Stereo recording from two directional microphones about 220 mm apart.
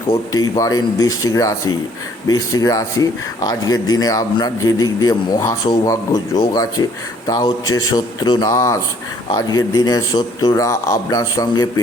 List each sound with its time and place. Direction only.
0.5 s speech: 15° left (ahead or behind)